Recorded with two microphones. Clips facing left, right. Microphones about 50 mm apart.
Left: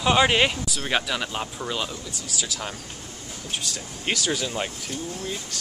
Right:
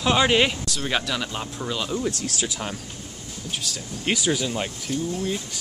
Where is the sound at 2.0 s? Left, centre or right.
Right.